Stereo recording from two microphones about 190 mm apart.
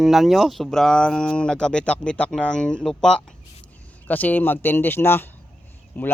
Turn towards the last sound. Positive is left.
turn(degrees=10)  # may be behind; listen again after turning